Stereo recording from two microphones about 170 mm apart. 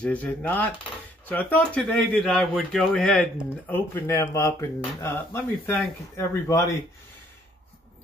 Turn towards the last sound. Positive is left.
turn(degrees=15)  # may be behind; listen again after turning